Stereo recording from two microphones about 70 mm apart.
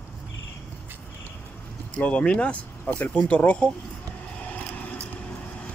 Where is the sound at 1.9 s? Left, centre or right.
Centre.